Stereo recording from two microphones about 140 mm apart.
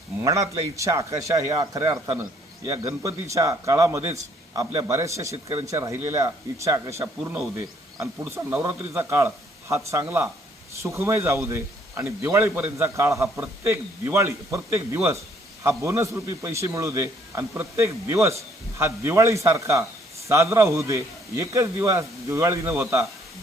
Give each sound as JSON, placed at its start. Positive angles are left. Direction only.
{"t": 0.2, "sound": "a man's voice", "side_deg": -20}
{"t": 5.3, "sound": "speech", "side_deg": -45}
{"t": 5.6, "sound": "a man's voice", "side_deg": -20}